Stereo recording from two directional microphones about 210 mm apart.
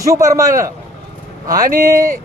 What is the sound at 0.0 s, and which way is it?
Speech, 15° right (ahead or behind).